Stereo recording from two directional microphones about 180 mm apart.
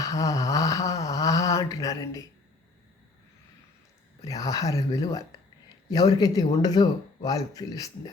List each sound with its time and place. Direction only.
0.0 s speech: 20° left (ahead or behind)
4.2 s speech: 20° left (ahead or behind)